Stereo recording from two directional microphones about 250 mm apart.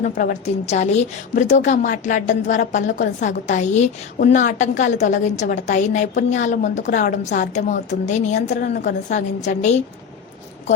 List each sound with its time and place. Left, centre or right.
0.0 s a woman's voice: left
2.8 s a woman's voice: left
3.2 s a woman's voice: left